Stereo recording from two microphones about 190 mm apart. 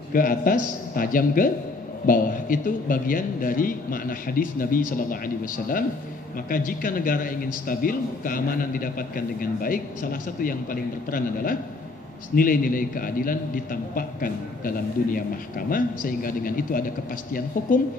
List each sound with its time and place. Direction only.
0.1 s a man's voice: 45° left (ahead or behind)
15.7 s a man's voice: 45° left (ahead or behind)